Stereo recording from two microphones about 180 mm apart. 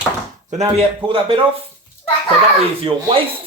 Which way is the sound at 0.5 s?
35° right (ahead or behind).